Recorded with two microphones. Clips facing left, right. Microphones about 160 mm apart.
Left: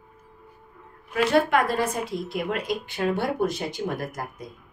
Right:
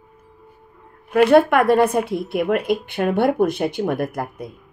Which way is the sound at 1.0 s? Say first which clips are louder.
Right 8 dB; 60° right (ahead or behind).